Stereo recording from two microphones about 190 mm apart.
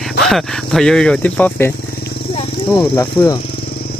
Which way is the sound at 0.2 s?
Centre (ahead or behind).